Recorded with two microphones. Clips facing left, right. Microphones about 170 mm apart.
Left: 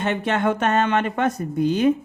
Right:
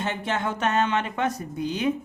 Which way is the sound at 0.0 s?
60° left (ahead or behind).